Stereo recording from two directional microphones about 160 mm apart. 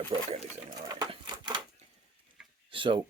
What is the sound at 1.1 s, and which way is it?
Typewriter, 30° right (ahead or behind).